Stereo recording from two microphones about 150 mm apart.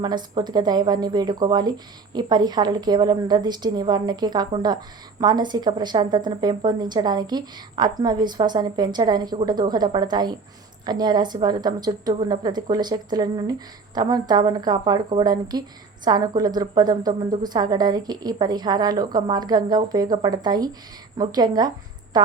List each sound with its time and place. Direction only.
0.0 s a woman's voice: 30° right (ahead or behind)